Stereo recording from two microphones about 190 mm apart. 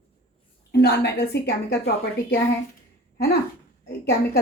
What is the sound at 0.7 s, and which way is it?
A woman's voice, 60° left (ahead or behind).